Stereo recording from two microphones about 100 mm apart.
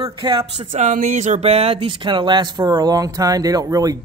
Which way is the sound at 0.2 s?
55° right (ahead or behind).